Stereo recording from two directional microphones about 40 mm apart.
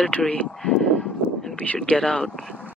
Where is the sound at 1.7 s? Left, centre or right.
Left.